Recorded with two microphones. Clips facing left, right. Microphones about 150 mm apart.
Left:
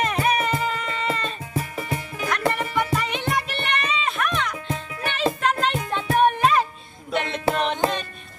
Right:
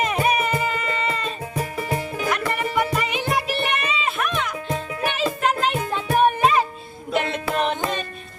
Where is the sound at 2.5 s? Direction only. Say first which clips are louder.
Right 2 dB; 5° right (ahead or behind).